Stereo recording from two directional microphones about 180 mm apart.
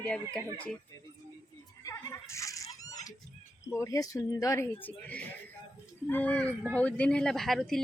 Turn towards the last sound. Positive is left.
turn(degrees=0)  # may be behind; listen again after turning